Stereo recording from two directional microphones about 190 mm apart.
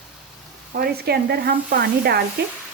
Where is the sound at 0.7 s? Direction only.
55° right (ahead or behind).